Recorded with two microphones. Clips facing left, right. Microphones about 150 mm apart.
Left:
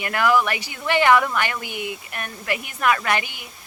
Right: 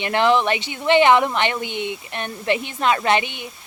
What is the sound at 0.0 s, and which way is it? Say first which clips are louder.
A woman's voice: right 2 dB; 25° right (ahead or behind).